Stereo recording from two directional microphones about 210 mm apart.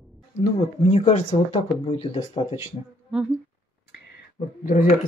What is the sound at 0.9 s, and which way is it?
Speech, 30° left (ahead or behind).